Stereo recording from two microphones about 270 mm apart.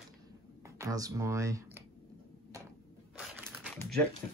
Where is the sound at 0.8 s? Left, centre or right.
Centre.